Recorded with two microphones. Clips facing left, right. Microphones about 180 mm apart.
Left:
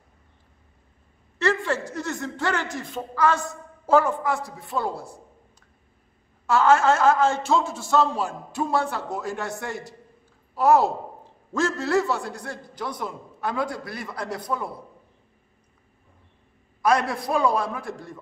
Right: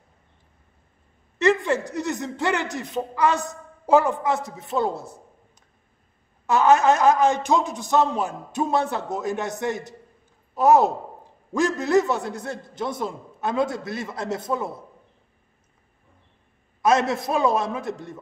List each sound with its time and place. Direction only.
1.4 s a man's voice: 20° right (ahead or behind)
6.4 s a man's voice: 20° right (ahead or behind)
16.8 s a man's voice: 20° right (ahead or behind)